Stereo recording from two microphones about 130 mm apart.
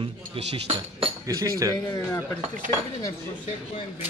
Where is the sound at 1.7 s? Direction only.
30° left (ahead or behind).